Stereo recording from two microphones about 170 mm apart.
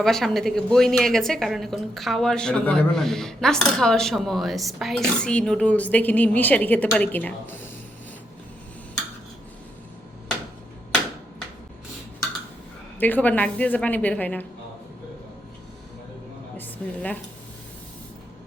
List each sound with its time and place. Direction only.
0.0 s speech: centre (ahead or behind)
13.0 s a woman's voice: 10° left (ahead or behind)
16.6 s a sound: 10° left (ahead or behind)